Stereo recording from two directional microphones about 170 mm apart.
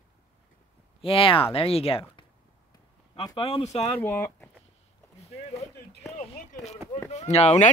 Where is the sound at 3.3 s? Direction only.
35° left (ahead or behind).